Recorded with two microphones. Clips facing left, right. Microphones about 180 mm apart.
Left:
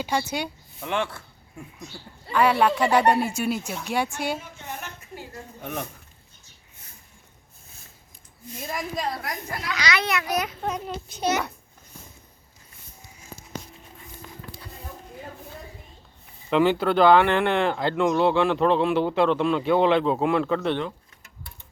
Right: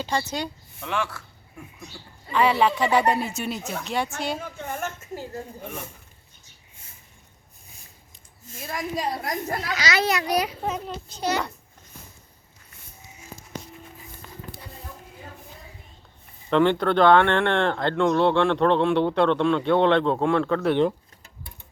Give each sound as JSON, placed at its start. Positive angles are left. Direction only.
{"t": 0.0, "sound": "speech", "side_deg": 10}
{"t": 0.8, "sound": "a man's voice", "side_deg": 20}
{"t": 2.3, "sound": "speech", "side_deg": 0}
{"t": 4.6, "sound": "a sound", "side_deg": -50}
{"t": 9.0, "sound": "a woman's voice", "side_deg": -15}
{"t": 9.2, "sound": "a child's voice", "side_deg": -30}
{"t": 10.5, "sound": "speech", "side_deg": -5}
{"t": 11.2, "sound": "a man's voice", "side_deg": 20}
{"t": 16.5, "sound": "speech", "side_deg": 5}